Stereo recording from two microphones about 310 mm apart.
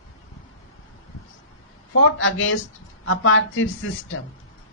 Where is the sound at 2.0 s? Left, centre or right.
Left.